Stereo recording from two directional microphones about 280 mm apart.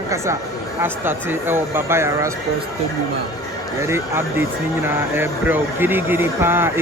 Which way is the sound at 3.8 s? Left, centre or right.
Centre.